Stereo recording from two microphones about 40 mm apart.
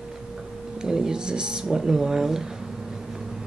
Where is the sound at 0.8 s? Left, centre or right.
Centre.